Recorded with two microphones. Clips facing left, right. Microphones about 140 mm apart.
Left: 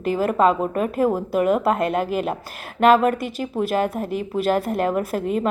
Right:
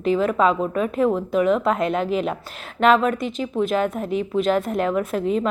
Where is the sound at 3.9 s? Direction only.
5° left (ahead or behind).